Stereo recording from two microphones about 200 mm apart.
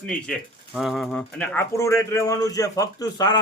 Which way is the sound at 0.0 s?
5° left (ahead or behind).